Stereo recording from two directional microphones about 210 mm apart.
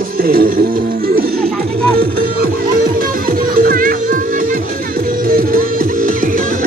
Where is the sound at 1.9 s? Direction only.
45° right (ahead or behind).